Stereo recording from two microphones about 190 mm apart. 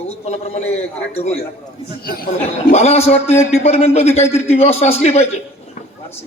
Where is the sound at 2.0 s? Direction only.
50° left (ahead or behind).